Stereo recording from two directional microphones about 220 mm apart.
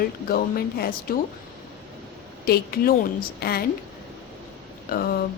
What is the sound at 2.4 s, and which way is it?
A woman's voice, 45° left (ahead or behind).